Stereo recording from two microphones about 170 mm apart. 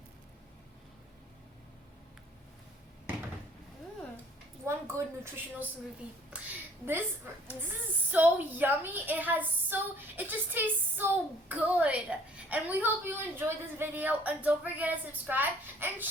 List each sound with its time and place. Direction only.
4.6 s a woman's voice: 15° right (ahead or behind)
6.3 s a sound: 5° right (ahead or behind)
8.1 s a woman's voice: 10° right (ahead or behind)